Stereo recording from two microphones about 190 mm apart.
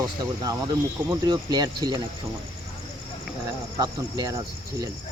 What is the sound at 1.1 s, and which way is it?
Speech, 20° right (ahead or behind).